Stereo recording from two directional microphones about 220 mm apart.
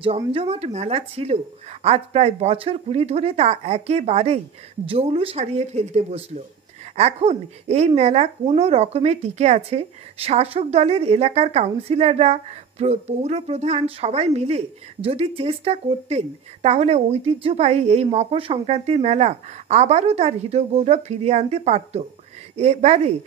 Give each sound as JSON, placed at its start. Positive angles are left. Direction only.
{"t": 0.2, "sound": "a woman's voice", "side_deg": -25}